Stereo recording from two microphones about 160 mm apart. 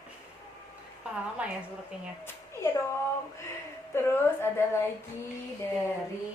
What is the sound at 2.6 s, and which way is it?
Speech, 15° left (ahead or behind).